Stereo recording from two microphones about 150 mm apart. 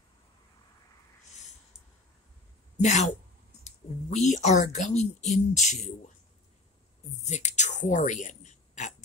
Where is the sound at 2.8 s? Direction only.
50° left (ahead or behind).